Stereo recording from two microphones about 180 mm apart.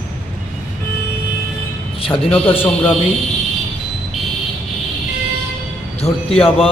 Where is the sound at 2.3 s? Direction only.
10° left (ahead or behind).